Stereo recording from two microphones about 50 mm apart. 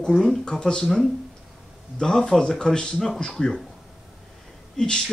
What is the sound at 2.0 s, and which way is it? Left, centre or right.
Speech, centre.